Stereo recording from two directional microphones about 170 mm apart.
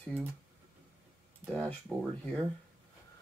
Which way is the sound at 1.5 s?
Centre (ahead or behind).